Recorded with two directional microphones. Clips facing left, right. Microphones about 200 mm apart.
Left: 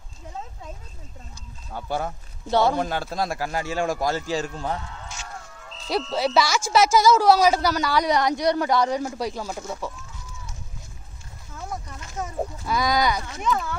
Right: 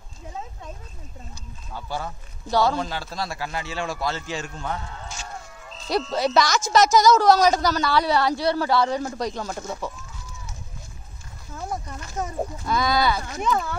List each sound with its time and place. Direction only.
1.7 s a man's voice: 50° left (ahead or behind)
2.5 s speech: 20° left (ahead or behind)
2.8 s a man's voice: 55° left (ahead or behind); by 4.7 s 35° left (ahead or behind)
4.8 s a sound: 35° right (ahead or behind)
5.7 s speech: centre (ahead or behind)
12.6 s speech: 15° left (ahead or behind)
13.2 s speech: 35° right (ahead or behind)